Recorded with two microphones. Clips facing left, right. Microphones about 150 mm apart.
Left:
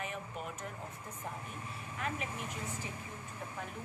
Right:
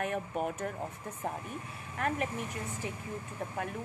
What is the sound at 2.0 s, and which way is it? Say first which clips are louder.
Speech: right 7 dB; 55° right (ahead or behind).